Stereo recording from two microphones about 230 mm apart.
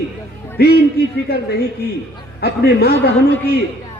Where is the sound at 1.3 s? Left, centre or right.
Left.